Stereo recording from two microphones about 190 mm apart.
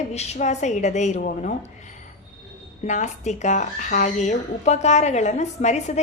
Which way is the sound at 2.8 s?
40° left (ahead or behind).